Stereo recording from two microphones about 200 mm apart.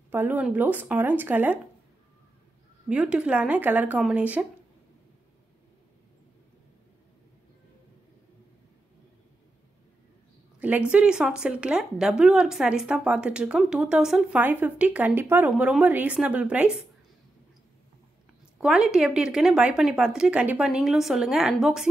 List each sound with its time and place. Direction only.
0.1 s speech: 10° right (ahead or behind)
2.9 s speech: 5° right (ahead or behind)
10.6 s a woman's voice: 5° right (ahead or behind)
18.6 s a woman's voice: 5° right (ahead or behind)